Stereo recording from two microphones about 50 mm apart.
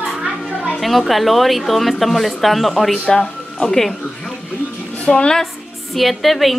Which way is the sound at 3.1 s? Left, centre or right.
Centre.